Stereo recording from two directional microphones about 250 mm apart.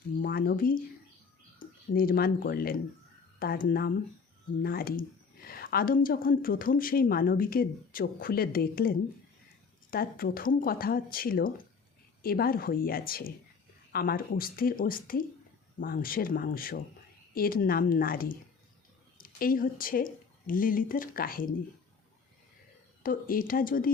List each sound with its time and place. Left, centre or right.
0.2 s a woman's voice: left
23.0 s a woman's voice: left